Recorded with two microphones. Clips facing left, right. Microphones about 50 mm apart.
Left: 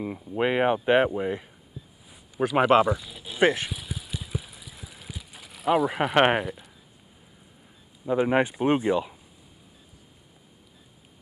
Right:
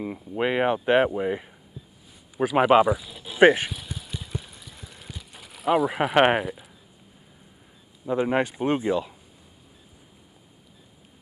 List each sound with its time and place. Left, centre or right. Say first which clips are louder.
0.0 s speech: even; centre
3.3 s speech: right 6 dB; centre
3.7 s vehicle: even; centre
8.2 s speech: left 1 dB; centre